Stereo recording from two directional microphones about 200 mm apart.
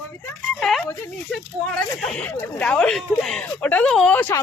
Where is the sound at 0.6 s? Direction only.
Centre (ahead or behind).